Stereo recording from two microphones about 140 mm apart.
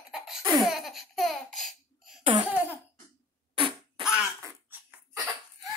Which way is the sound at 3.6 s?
40° right (ahead or behind).